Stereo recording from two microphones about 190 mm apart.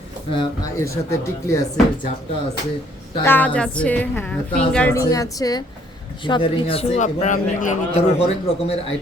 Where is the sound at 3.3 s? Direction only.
10° left (ahead or behind).